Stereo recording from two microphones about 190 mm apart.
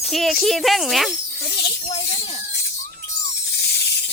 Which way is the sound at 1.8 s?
35° left (ahead or behind).